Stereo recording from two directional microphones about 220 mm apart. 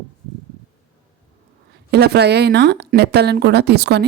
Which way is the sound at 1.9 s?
50° right (ahead or behind).